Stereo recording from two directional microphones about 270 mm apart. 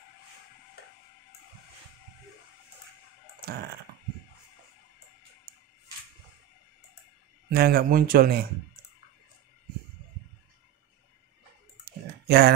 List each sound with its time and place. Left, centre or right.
7.5 s speech: right
11.8 s typing: right